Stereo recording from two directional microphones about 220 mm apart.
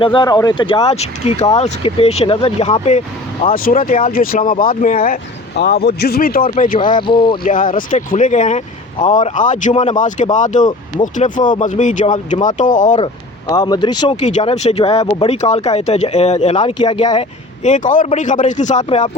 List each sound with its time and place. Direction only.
0.0 s speech: 20° left (ahead or behind)
1.4 s speech: 20° left (ahead or behind)
6.7 s speech: 20° left (ahead or behind)
7.4 s speech: 35° left (ahead or behind)
13.5 s speech: 20° left (ahead or behind)
14.2 s speech: 30° left (ahead or behind)
17.6 s speech: 35° left (ahead or behind)